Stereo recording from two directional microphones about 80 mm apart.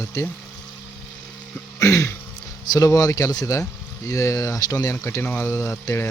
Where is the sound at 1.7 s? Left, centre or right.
Left.